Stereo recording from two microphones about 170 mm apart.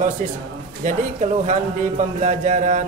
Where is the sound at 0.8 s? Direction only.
40° right (ahead or behind).